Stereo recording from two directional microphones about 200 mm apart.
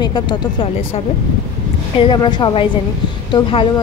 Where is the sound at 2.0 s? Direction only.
20° left (ahead or behind).